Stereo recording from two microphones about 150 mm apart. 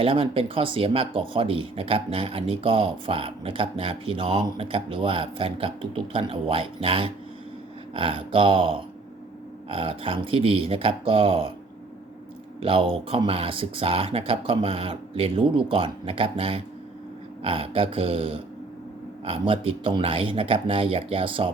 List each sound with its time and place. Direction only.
0.0 s speech: 35° right (ahead or behind)
12.6 s speech: 35° right (ahead or behind)